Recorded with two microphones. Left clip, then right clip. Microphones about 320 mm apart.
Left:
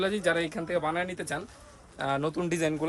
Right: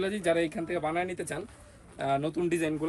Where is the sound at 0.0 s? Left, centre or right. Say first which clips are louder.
Left 1 dB; centre.